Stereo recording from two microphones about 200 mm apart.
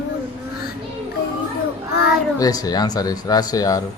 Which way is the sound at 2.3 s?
20° left (ahead or behind).